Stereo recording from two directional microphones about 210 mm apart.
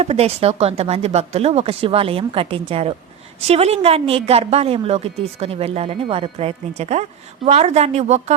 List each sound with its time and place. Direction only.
0.0 s a woman's voice: 30° right (ahead or behind)